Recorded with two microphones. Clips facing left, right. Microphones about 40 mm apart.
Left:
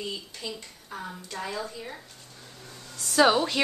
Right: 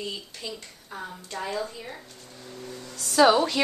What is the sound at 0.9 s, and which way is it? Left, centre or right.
Speech, centre.